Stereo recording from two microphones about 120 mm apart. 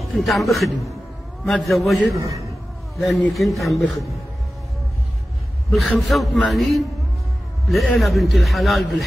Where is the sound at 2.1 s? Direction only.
25° right (ahead or behind).